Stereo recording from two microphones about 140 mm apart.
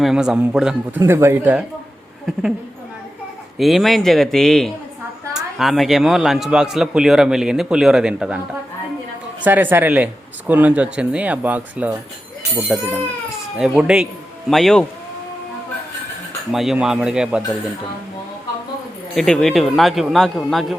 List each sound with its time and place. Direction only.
0.0 s speech: 5° right (ahead or behind)
0.9 s speech: 15° right (ahead or behind)
3.6 s speech: centre (ahead or behind)
9.4 s speech: 10° right (ahead or behind); by 14.8 s 5° left (ahead or behind)
16.5 s speech: centre (ahead or behind)
19.1 s speech: 5° left (ahead or behind)